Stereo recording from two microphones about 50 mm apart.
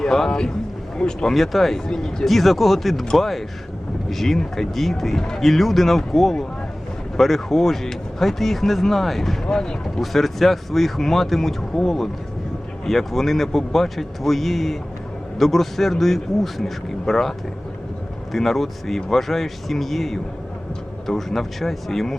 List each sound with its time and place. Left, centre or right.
0.0 s speech: centre
1.3 s speech: centre
9.5 s speech: centre
10.0 s speech: centre